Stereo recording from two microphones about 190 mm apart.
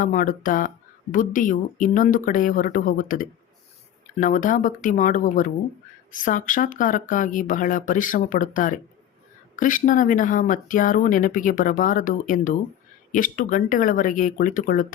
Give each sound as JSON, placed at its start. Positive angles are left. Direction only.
{"t": 0.0, "sound": "speech", "side_deg": 45}